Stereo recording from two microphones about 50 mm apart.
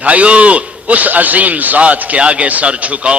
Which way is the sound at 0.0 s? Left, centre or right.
Right.